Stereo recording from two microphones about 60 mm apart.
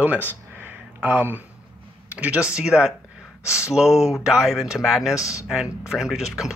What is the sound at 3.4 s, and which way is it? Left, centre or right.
Speech, left.